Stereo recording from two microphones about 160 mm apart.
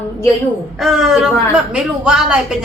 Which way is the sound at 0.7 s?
5° right (ahead or behind).